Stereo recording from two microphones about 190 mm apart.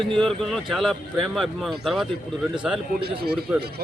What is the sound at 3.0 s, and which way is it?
Speech, 55° right (ahead or behind).